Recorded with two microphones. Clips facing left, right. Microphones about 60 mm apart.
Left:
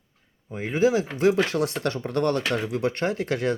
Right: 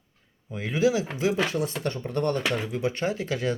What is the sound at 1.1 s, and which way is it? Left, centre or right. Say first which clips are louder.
Speech: left 4 dB; left.